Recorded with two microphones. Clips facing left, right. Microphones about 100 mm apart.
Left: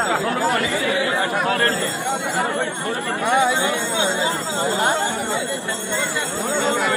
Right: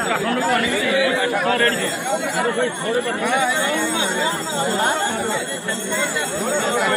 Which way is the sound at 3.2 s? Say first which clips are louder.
Left 6 dB; 20° left (ahead or behind).